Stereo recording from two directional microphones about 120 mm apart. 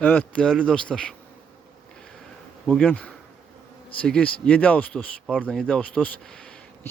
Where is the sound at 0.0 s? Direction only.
10° left (ahead or behind).